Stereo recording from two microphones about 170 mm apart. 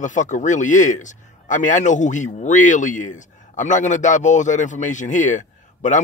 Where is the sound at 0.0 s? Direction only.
45° left (ahead or behind).